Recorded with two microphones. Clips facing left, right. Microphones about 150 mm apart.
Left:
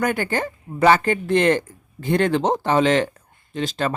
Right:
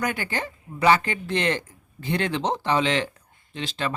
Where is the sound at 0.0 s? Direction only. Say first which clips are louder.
Left 6 dB; 50° left (ahead or behind).